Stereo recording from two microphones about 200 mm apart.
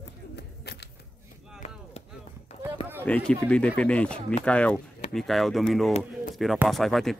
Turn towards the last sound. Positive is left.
turn(degrees=0)  # may be behind; listen again after turning